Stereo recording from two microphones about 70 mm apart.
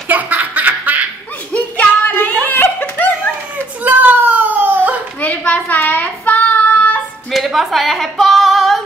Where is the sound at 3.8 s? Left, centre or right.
Right.